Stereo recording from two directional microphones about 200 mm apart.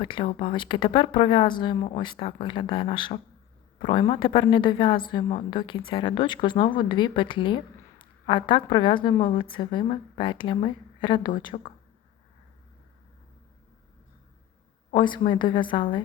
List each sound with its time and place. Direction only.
0.0 s a woman's voice: 25° left (ahead or behind)
11.5 s speech: 35° left (ahead or behind)
14.8 s a woman's voice: 25° left (ahead or behind)